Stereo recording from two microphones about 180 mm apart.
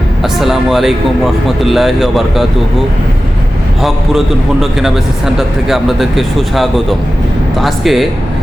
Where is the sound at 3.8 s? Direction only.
Centre (ahead or behind).